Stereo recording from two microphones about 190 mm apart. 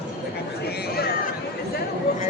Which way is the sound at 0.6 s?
55° left (ahead or behind).